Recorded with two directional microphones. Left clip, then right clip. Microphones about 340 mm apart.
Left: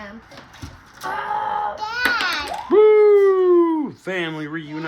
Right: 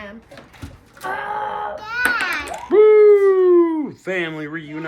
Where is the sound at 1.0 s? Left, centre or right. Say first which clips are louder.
Left 1 dB; centre.